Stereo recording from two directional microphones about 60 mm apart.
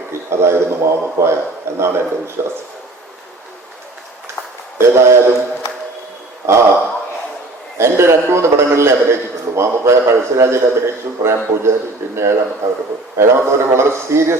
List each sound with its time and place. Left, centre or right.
0.1 s a man's voice: right
4.8 s a man's voice: right
6.4 s a man's voice: right
7.8 s a man's voice: right